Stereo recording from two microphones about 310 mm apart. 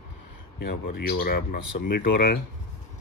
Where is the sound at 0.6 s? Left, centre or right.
Left.